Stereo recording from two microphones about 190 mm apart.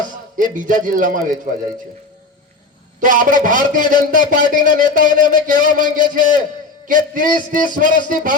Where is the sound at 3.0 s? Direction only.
45° right (ahead or behind).